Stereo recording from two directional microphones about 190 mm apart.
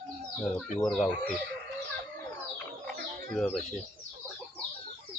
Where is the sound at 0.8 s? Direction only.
5° left (ahead or behind).